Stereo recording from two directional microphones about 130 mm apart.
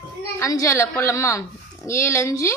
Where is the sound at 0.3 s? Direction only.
25° left (ahead or behind).